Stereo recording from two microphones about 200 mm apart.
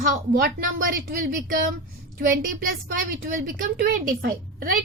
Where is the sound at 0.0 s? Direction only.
45° right (ahead or behind).